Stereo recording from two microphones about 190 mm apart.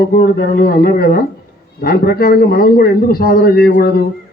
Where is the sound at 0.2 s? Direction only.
55° left (ahead or behind).